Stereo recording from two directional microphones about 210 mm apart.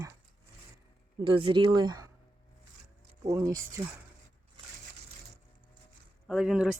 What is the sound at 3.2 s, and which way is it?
Speech, 15° right (ahead or behind).